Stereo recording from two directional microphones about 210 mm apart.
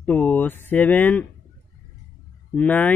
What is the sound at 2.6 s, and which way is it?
Speech, 5° left (ahead or behind).